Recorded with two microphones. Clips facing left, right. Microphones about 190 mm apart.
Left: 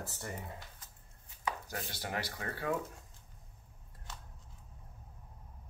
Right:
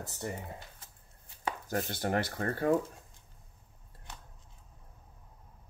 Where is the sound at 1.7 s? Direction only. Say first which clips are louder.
Right 9 dB; 50° right (ahead or behind).